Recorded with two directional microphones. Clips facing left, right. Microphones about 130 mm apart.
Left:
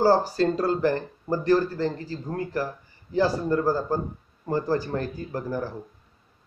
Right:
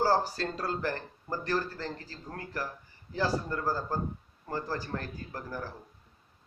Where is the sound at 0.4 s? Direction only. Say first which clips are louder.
Left 11 dB; 10° left (ahead or behind).